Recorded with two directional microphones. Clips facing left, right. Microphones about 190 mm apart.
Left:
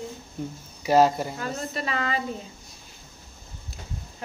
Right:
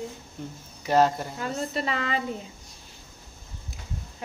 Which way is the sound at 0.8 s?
10° left (ahead or behind).